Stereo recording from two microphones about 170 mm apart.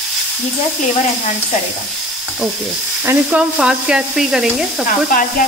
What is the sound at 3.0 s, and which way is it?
Stir, 10° right (ahead or behind).